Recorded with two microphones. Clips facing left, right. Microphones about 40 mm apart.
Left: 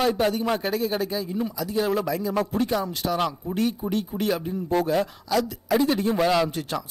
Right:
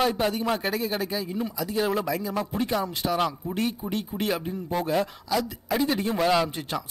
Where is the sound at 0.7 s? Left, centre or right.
Right.